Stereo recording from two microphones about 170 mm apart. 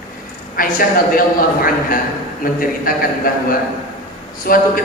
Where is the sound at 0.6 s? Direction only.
55° left (ahead or behind).